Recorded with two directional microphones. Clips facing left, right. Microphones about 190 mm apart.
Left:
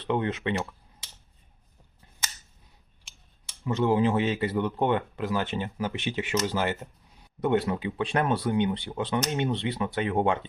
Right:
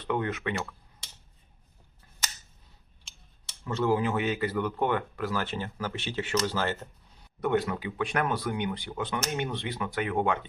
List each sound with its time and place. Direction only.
0.0 s speech: 25° left (ahead or behind)
3.0 s speech: 15° left (ahead or behind)
7.4 s speech: 25° left (ahead or behind)